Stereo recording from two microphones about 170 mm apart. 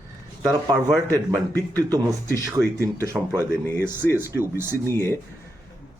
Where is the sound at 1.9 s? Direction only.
20° right (ahead or behind).